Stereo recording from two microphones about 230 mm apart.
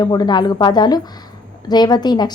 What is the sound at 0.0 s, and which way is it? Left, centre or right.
A woman's voice, centre.